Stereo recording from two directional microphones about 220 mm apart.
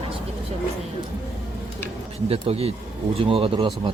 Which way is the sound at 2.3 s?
25° right (ahead or behind).